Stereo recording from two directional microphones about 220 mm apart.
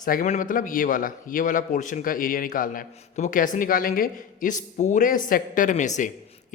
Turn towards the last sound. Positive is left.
turn(degrees=35)  # may be behind; listen again after turning